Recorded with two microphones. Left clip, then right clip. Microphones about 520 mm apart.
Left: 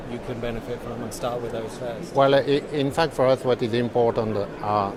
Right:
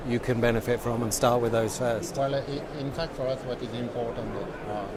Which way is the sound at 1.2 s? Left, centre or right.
Right.